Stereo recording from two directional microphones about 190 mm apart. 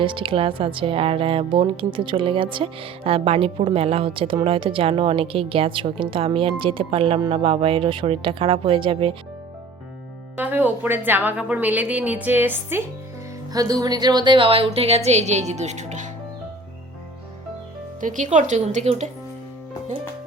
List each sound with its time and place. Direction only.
0.0 s speech: 25° right (ahead or behind)
10.3 s a woman's voice: 10° right (ahead or behind); by 16.0 s 40° right (ahead or behind)
18.0 s a woman's voice: 40° right (ahead or behind)